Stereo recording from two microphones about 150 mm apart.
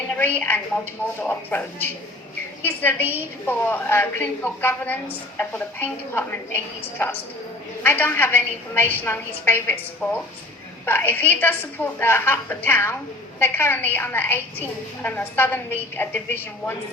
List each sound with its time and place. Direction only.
0.3 s a woman's voice: 10° left (ahead or behind)